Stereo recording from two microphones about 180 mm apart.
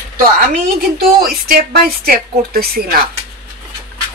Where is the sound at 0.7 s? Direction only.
55° right (ahead or behind).